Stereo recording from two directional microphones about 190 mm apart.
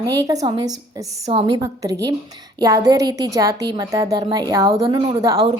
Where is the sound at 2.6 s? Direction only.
20° right (ahead or behind).